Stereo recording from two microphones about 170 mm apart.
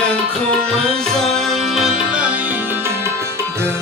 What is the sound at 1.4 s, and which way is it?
Music, centre (ahead or behind).